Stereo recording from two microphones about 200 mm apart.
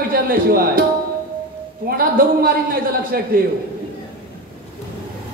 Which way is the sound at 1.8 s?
45° right (ahead or behind).